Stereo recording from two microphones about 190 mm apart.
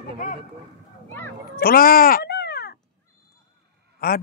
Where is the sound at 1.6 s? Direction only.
50° left (ahead or behind).